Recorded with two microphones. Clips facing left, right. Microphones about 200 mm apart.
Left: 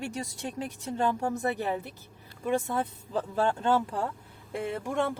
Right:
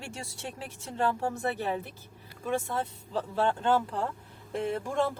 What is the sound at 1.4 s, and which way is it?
Speech, 15° left (ahead or behind).